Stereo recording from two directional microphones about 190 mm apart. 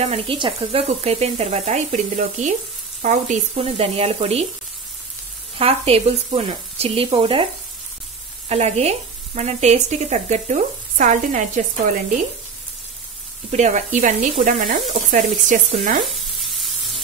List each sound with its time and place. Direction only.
0.0 s frying: 30° right (ahead or behind)
5.6 s frying: 30° right (ahead or behind)
8.5 s frying: 35° right (ahead or behind)
13.5 s frying: 35° right (ahead or behind)
16.1 s sizzle: centre (ahead or behind)